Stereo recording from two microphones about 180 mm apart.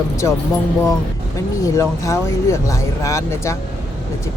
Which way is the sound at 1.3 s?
15° left (ahead or behind).